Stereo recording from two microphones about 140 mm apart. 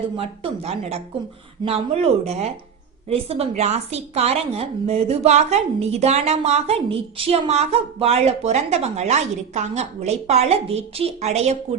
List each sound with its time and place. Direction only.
0.2 s a woman's voice: 45° right (ahead or behind)